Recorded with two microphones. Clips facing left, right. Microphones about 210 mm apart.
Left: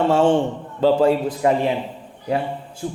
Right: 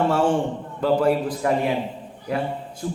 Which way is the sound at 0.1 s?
25° left (ahead or behind).